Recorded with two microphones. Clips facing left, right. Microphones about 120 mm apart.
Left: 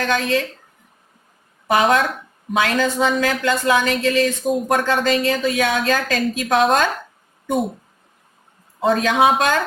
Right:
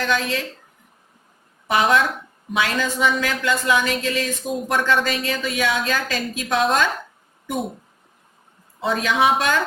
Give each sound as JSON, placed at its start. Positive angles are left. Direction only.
{"t": 0.0, "sound": "speech", "side_deg": 45}
{"t": 1.6, "sound": "speech", "side_deg": 45}
{"t": 8.8, "sound": "speech", "side_deg": 45}